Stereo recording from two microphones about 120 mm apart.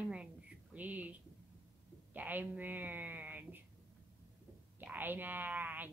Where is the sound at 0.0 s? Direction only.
10° right (ahead or behind).